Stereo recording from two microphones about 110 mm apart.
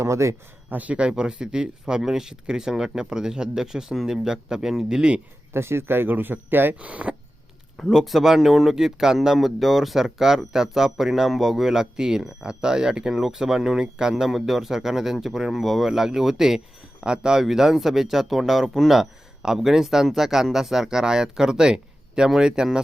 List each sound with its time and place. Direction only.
0.0 s speech: 25° right (ahead or behind)
0.8 s speech: 10° right (ahead or behind)
5.5 s speech: 25° right (ahead or behind); by 22.8 s 5° right (ahead or behind)